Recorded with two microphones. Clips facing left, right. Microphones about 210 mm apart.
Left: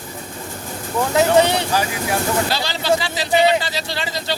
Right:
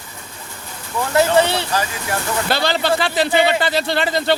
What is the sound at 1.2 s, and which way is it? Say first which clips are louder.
Speech: even; 15° left (ahead or behind).